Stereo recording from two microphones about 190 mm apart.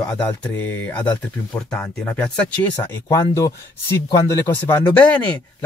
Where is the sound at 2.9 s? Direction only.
20° left (ahead or behind).